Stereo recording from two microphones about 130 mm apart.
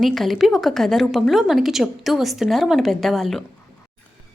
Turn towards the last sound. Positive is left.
turn(degrees=0)  # may be behind; listen again after turning